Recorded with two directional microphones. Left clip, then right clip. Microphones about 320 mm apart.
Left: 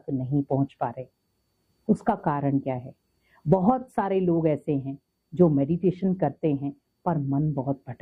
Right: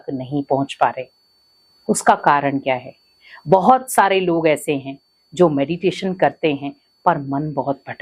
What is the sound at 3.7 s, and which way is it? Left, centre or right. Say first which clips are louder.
Speech: right 11 dB; centre.